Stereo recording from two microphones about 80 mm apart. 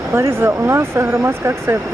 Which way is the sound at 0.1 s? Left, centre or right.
Right.